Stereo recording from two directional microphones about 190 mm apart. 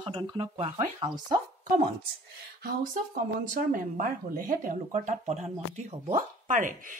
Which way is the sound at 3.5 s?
45° right (ahead or behind).